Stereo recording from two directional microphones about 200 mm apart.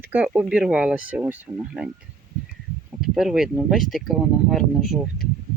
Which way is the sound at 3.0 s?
Centre (ahead or behind).